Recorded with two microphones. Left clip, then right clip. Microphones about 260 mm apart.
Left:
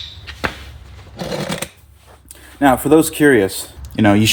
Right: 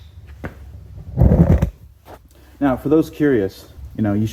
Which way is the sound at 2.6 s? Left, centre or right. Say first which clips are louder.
Left 5 dB; centre.